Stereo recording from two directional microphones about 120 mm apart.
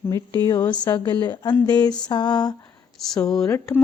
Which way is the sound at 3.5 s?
25° left (ahead or behind).